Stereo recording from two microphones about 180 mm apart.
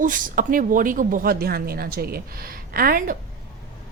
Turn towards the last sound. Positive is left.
turn(degrees=-55)  # may be behind; listen again after turning